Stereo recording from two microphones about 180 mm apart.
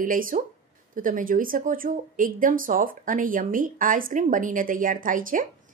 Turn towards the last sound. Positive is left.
turn(degrees=-50)  # may be behind; listen again after turning